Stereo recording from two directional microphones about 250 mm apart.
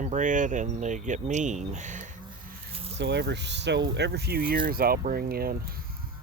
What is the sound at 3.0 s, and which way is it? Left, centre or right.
Speech, right.